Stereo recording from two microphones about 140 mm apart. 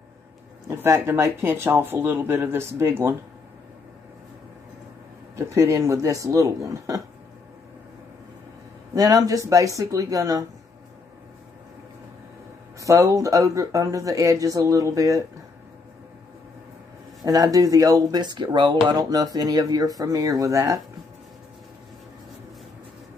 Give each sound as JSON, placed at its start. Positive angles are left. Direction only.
{"t": 0.7, "sound": "speech", "side_deg": -20}
{"t": 5.3, "sound": "speech", "side_deg": -20}
{"t": 8.9, "sound": "speech", "side_deg": -25}
{"t": 12.8, "sound": "speech", "side_deg": -25}
{"t": 17.2, "sound": "speech", "side_deg": -25}